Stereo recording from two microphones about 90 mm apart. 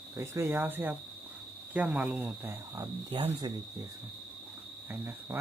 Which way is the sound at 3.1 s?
60° right (ahead or behind).